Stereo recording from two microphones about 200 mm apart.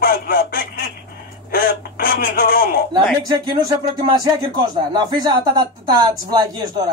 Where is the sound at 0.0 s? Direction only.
45° left (ahead or behind).